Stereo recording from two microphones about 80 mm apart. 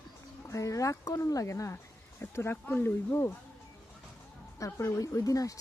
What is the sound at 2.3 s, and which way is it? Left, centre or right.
Speech, left.